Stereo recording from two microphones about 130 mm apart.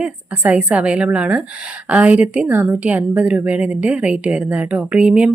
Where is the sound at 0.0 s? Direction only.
10° right (ahead or behind).